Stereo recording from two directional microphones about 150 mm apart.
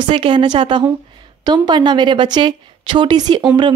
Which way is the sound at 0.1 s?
35° right (ahead or behind).